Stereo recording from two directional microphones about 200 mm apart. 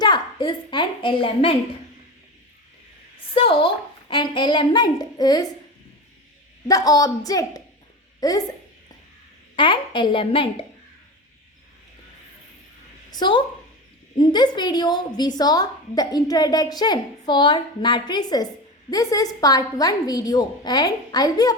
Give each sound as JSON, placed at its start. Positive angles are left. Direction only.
{"t": 0.0, "sound": "a sound", "side_deg": 20}
{"t": 3.3, "sound": "a woman's voice", "side_deg": 25}
{"t": 6.7, "sound": "a woman's voice", "side_deg": 15}
{"t": 9.6, "sound": "a woman's voice", "side_deg": 25}
{"t": 13.1, "sound": "a woman's voice", "side_deg": 20}